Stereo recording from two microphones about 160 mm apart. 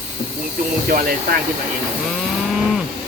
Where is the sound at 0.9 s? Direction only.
60° right (ahead or behind).